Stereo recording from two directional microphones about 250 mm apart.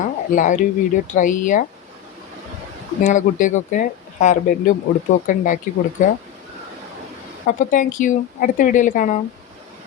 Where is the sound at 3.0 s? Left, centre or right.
Left.